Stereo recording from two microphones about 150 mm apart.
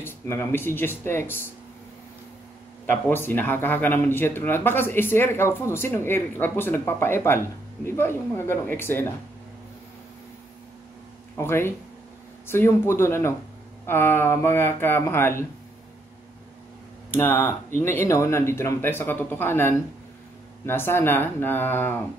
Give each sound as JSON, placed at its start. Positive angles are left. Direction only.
{"t": 0.0, "sound": "speech", "side_deg": 15}
{"t": 2.9, "sound": "speech", "side_deg": 15}
{"t": 11.3, "sound": "speech", "side_deg": 15}
{"t": 17.1, "sound": "speech", "side_deg": 15}